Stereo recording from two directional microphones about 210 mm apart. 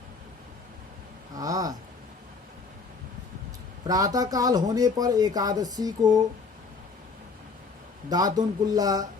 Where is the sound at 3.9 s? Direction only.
15° right (ahead or behind).